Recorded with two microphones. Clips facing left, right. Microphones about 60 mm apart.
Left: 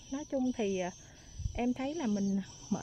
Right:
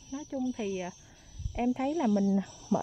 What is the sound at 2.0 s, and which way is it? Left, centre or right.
Speech, right.